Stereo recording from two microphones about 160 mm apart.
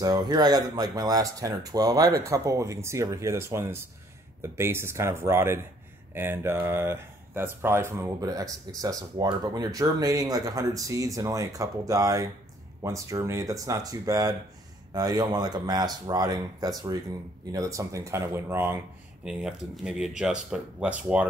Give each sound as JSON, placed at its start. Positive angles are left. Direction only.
{"t": 0.0, "sound": "speech", "side_deg": -25}
{"t": 19.2, "sound": "speech", "side_deg": -5}